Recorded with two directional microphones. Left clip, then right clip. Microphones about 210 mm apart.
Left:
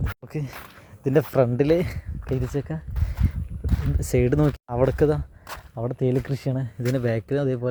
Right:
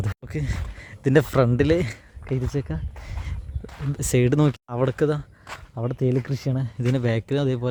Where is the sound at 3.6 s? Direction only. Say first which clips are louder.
Left 3 dB; 50° left (ahead or behind).